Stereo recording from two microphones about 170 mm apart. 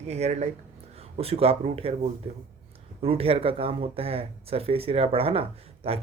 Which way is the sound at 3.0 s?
35° right (ahead or behind).